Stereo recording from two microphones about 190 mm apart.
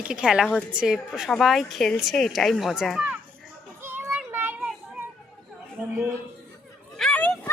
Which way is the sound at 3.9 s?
10° right (ahead or behind).